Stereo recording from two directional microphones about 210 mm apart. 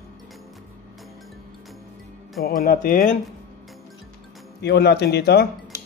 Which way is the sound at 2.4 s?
45° left (ahead or behind).